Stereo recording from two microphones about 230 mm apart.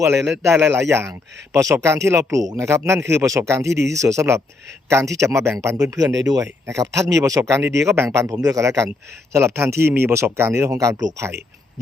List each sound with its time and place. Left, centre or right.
0.0 s speech: centre